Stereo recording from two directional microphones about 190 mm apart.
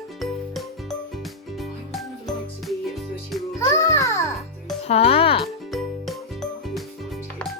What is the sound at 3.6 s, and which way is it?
Music, 15° left (ahead or behind).